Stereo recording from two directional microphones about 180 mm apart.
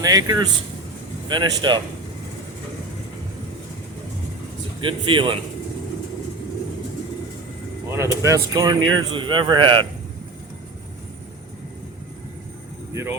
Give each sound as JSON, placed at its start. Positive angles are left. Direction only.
{"t": 0.0, "sound": "speech", "side_deg": -20}
{"t": 4.8, "sound": "speech", "side_deg": -30}
{"t": 7.9, "sound": "speech", "side_deg": -15}
{"t": 12.9, "sound": "speech", "side_deg": -15}